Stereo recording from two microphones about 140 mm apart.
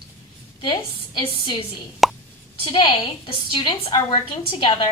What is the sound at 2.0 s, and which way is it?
Plop, centre (ahead or behind).